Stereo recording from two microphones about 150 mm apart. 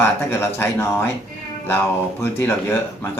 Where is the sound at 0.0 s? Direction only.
15° left (ahead or behind).